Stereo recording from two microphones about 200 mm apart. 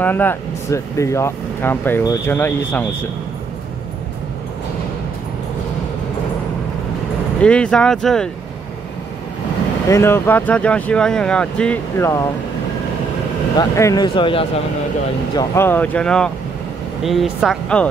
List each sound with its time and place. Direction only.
0.0 s speech: 10° left (ahead or behind)
7.4 s speech: 5° left (ahead or behind)
9.8 s speech: 15° left (ahead or behind)
13.6 s speech: 15° left (ahead or behind)
15.3 s speech: 10° left (ahead or behind)